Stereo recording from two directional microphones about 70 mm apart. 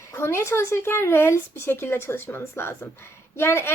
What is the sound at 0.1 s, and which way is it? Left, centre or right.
Speech, left.